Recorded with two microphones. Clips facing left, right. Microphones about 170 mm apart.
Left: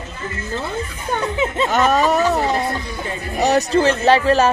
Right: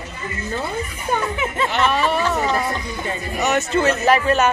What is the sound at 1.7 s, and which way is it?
A woman's voice, 45° left (ahead or behind).